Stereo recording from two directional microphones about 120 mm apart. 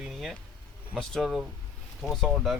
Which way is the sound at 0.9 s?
5° left (ahead or behind).